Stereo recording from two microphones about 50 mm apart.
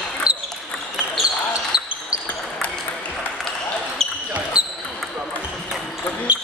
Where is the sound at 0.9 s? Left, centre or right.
Centre.